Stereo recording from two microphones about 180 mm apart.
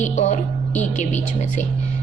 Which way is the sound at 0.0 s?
40° left (ahead or behind).